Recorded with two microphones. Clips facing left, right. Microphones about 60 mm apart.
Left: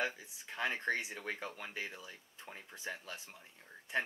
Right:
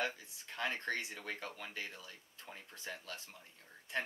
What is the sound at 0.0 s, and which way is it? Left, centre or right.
Speech, centre.